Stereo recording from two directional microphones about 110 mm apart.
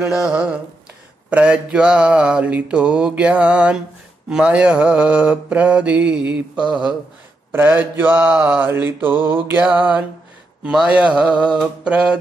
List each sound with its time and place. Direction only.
0.0 s mantra: 5° right (ahead or behind)